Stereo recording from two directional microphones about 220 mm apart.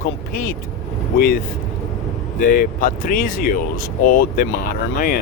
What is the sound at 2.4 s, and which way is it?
Speech, 40° left (ahead or behind).